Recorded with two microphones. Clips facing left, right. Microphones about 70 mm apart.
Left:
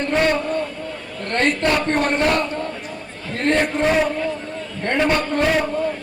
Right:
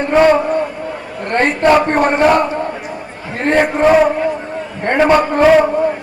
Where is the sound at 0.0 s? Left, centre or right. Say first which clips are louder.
Right 8 dB; right.